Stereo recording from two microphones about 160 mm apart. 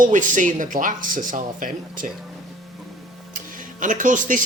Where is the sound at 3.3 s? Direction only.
55° right (ahead or behind).